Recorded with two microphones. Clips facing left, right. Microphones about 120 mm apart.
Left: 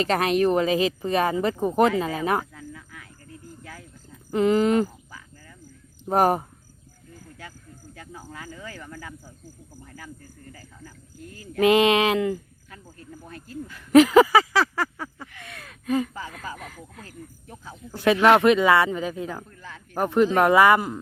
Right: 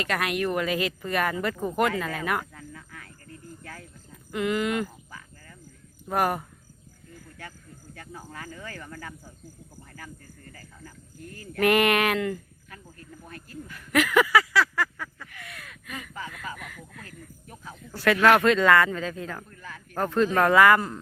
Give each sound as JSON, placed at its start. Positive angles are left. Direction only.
{"t": 0.0, "sound": "speech", "side_deg": 30}
{"t": 2.4, "sound": "a sound", "side_deg": 5}
{"t": 4.3, "sound": "speech", "side_deg": 30}
{"t": 6.1, "sound": "speech", "side_deg": 35}
{"t": 7.9, "sound": "speech", "side_deg": 10}
{"t": 9.8, "sound": "a sound", "side_deg": 10}
{"t": 10.5, "sound": "speech", "side_deg": 15}
{"t": 14.8, "sound": "a sound", "side_deg": 30}
{"t": 17.9, "sound": "speech", "side_deg": 20}